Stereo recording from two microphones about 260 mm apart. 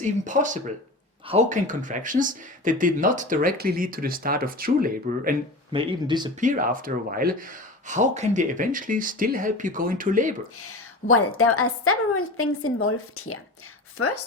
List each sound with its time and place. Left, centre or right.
0.0 s speech: right
5.7 s speech: centre
6.4 s speech: right
10.6 s a woman's voice: left